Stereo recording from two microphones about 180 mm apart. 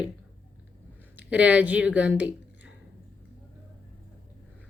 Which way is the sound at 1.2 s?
5° right (ahead or behind).